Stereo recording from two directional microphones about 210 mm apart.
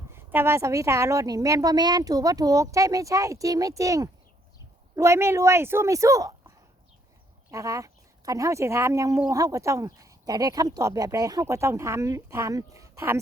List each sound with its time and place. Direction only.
0.1 s speech: 10° right (ahead or behind)
7.5 s speech: 15° right (ahead or behind)